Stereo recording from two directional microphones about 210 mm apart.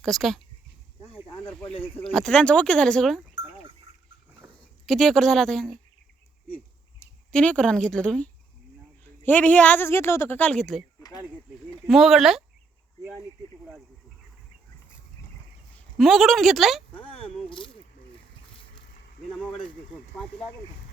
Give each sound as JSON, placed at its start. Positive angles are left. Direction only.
{"t": 0.0, "sound": "speech", "side_deg": 0}
{"t": 1.6, "sound": "speech", "side_deg": 25}
{"t": 2.0, "sound": "speech", "side_deg": 5}
{"t": 4.9, "sound": "speech", "side_deg": 0}
{"t": 7.3, "sound": "speech", "side_deg": 5}
{"t": 15.7, "sound": "a woman's voice", "side_deg": 0}
{"t": 16.9, "sound": "a sound", "side_deg": 25}